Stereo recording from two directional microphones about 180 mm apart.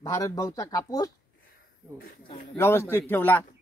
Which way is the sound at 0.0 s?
20° left (ahead or behind).